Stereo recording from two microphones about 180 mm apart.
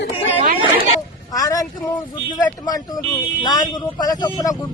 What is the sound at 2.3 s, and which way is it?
Speech, 20° left (ahead or behind).